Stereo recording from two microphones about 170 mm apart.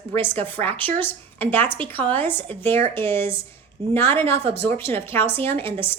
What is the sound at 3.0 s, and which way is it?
Speech, 30° right (ahead or behind).